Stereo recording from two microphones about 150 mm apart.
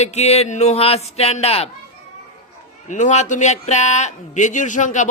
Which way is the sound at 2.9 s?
55° left (ahead or behind).